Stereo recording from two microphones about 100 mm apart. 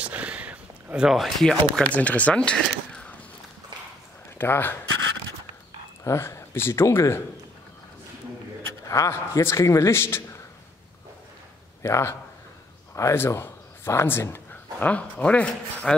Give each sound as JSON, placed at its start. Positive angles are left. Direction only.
{"t": 0.0, "sound": "a sound", "side_deg": -15}
{"t": 1.8, "sound": "speech", "side_deg": 15}
{"t": 4.4, "sound": "a man's voice", "side_deg": 20}
{"t": 6.0, "sound": "a man's voice", "side_deg": 25}
{"t": 8.6, "sound": "a man's voice", "side_deg": 35}
{"t": 11.8, "sound": "a man's voice", "side_deg": 25}